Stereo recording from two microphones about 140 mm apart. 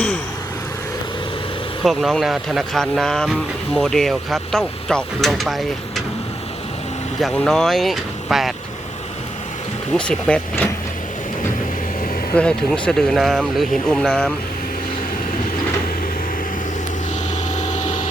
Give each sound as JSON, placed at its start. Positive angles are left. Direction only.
{"t": 1.8, "sound": "speech", "side_deg": 0}
{"t": 7.2, "sound": "speech", "side_deg": 0}
{"t": 9.9, "sound": "speech", "side_deg": 5}
{"t": 12.3, "sound": "speech", "side_deg": 5}
{"t": 17.3, "sound": "a sound", "side_deg": 60}